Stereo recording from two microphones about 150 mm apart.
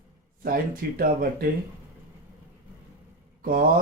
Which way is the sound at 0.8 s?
90° right.